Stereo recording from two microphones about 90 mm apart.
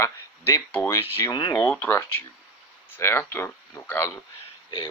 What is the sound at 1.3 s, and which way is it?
Speech, 60° left (ahead or behind).